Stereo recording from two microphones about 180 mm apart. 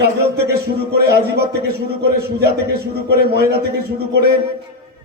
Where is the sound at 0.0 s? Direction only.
65° right (ahead or behind).